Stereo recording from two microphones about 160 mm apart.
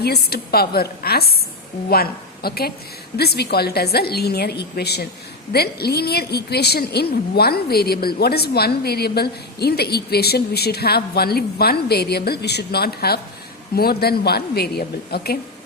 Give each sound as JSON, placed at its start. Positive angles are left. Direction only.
{"t": 0.0, "sound": "a woman's voice", "side_deg": 85}
{"t": 5.5, "sound": "a woman's voice", "side_deg": 80}